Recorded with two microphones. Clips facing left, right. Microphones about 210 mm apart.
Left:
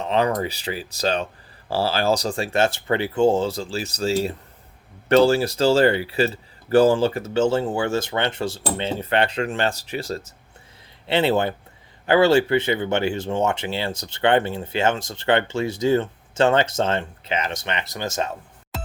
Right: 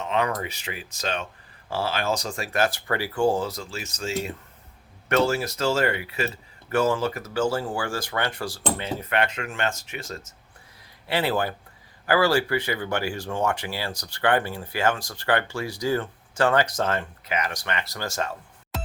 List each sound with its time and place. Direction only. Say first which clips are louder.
0.0 s speech: left 5 dB; 35° left (ahead or behind)
18.7 s music: even; centre (ahead or behind)